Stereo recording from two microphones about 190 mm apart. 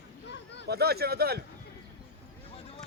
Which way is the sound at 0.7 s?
55° right (ahead or behind).